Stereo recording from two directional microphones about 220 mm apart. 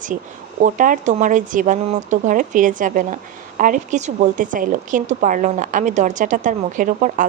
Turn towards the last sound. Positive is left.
turn(degrees=-35)  # may be behind; listen again after turning